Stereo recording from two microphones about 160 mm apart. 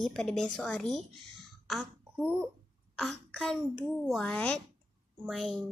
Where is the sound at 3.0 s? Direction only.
Centre (ahead or behind).